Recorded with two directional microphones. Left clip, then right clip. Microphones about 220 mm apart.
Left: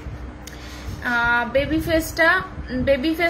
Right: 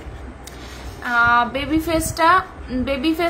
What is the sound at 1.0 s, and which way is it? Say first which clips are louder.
Female singing: right 4 dB; 20° right (ahead or behind).